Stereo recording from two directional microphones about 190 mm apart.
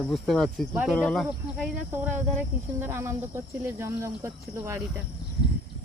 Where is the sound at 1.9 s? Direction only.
10° right (ahead or behind).